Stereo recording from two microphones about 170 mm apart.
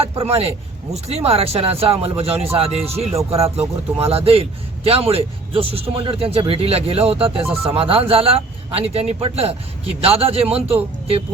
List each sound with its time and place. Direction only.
0.0 s a man's voice: 35° right (ahead or behind)